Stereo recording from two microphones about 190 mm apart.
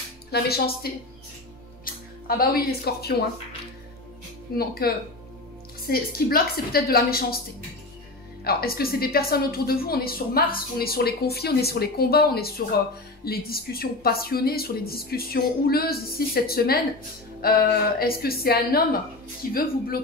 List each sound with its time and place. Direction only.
0.3 s speech: 55° left (ahead or behind)
1.9 s music: 50° left (ahead or behind)
2.2 s a woman's voice: 50° left (ahead or behind)
4.6 s a woman's voice: 50° left (ahead or behind)
8.5 s a woman's voice: 55° left (ahead or behind)